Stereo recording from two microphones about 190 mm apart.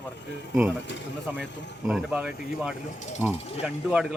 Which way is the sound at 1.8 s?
Centre (ahead or behind).